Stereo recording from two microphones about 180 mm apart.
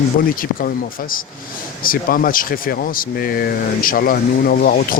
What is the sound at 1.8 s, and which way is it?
Speech, 50° left (ahead or behind).